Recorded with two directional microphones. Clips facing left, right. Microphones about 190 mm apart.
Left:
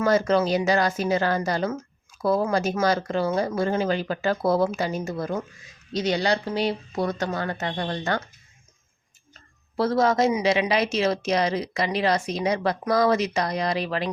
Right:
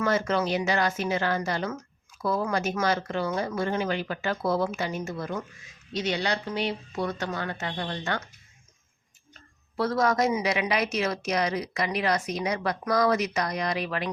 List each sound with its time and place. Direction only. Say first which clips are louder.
0.0 s a woman's voice: left 5 dB; 35° left (ahead or behind)
9.7 s a woman's voice: left 4 dB; 30° left (ahead or behind)